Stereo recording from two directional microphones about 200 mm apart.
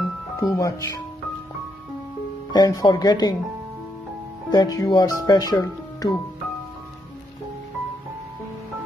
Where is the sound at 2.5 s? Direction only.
20° left (ahead or behind).